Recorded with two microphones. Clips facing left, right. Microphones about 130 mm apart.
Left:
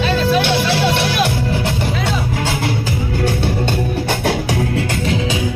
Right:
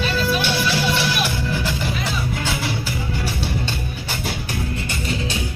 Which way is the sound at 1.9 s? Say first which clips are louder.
Left 6 dB; 90° left.